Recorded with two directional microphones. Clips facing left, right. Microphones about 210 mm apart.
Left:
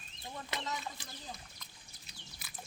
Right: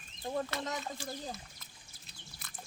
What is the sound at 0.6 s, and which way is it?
Speech, 45° right (ahead or behind).